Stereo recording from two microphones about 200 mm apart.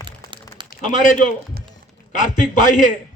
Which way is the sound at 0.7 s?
40° left (ahead or behind).